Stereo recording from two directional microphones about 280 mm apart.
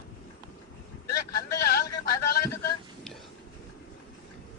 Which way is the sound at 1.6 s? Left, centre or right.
Left.